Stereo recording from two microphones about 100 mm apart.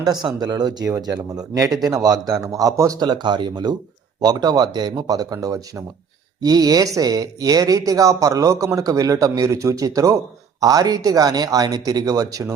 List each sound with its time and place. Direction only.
0.0 s speech: 45° right (ahead or behind)
3.1 s speech: 50° right (ahead or behind)